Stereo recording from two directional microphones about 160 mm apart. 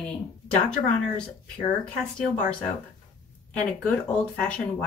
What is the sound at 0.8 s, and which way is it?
Speech, 50° left (ahead or behind).